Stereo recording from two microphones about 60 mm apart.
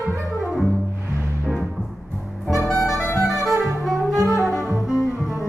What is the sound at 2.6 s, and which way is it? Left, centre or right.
Music, centre.